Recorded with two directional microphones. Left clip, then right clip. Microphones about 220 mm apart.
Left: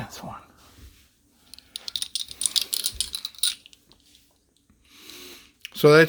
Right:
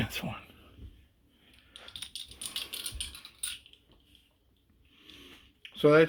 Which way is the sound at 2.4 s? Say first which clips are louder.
Left 12 dB; 45° left (ahead or behind).